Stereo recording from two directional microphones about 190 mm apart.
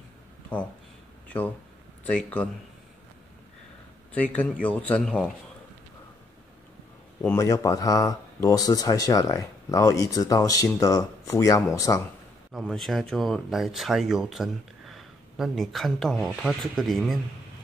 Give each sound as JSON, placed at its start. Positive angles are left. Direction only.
{"t": 2.0, "sound": "speech", "side_deg": 5}
{"t": 4.1, "sound": "speech", "side_deg": 5}
{"t": 7.2, "sound": "speech", "side_deg": 15}
{"t": 12.5, "sound": "speech", "side_deg": 0}